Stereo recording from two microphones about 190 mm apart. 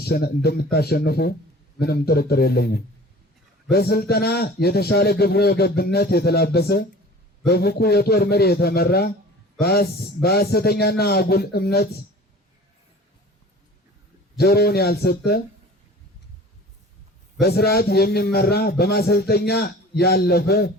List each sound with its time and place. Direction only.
0.0 s a man's voice: 55° left (ahead or behind)
14.3 s a man's voice: 55° left (ahead or behind)
17.4 s a man's voice: 55° left (ahead or behind)